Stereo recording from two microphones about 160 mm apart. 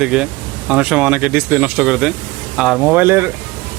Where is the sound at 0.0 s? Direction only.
5° right (ahead or behind).